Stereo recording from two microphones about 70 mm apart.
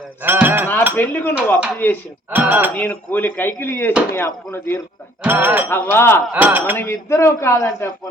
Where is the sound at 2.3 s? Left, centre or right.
Right.